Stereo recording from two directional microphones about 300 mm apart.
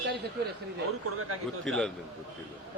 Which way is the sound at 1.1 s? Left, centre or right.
Right.